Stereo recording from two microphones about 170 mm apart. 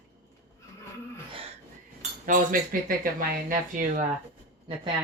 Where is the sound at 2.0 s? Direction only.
50° right (ahead or behind).